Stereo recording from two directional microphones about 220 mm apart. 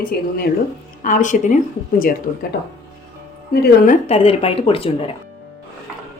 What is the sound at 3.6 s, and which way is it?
A woman's voice, 35° left (ahead or behind).